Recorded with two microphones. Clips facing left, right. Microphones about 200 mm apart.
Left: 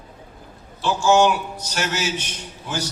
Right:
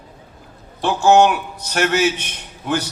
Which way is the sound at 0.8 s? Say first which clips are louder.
Right 4 dB; 60° right (ahead or behind).